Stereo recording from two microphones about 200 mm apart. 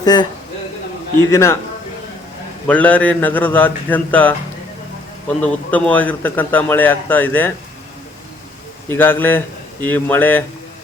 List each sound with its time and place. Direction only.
0.0 s speech: 20° left (ahead or behind)
1.3 s speech: 15° left (ahead or behind)
2.6 s speech: 5° left (ahead or behind)
5.4 s speech: 5° left (ahead or behind)
8.9 s speech: 10° left (ahead or behind)